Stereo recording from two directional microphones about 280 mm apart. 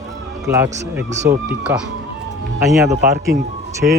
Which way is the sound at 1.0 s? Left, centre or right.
Right.